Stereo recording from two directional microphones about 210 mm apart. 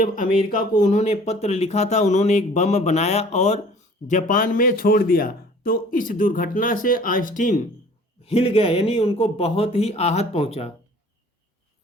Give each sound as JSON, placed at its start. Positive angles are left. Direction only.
{"t": 0.0, "sound": "a man's voice", "side_deg": 40}